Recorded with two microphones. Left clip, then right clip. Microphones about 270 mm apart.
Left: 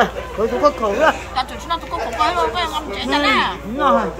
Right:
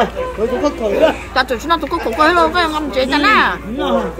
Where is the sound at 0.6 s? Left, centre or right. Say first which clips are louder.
Right 1 dB; centre.